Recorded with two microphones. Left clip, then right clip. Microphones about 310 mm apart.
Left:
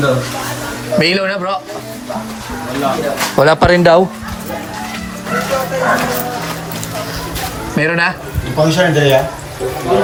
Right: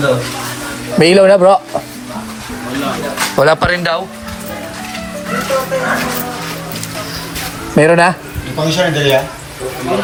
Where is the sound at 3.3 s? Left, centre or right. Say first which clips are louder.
Left 2 dB; centre.